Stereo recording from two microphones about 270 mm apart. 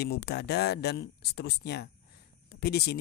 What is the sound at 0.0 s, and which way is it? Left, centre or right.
A man's voice, left.